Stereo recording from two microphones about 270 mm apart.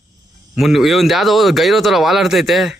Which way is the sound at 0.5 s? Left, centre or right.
Centre.